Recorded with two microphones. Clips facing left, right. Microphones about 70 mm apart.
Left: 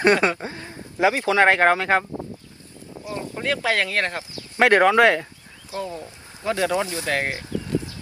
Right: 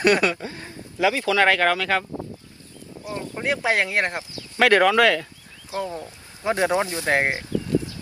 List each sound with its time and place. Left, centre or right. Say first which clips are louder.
0.0 s speech: left 1 dB; left
3.3 s speech: right 1 dB; centre
4.4 s speech: left 1 dB; left
5.7 s speech: right 1 dB; right